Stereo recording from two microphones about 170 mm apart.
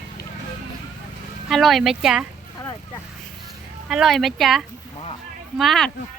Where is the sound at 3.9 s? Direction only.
Centre (ahead or behind).